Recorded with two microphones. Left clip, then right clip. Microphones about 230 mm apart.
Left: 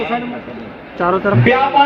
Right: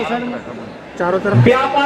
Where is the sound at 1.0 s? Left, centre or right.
Left.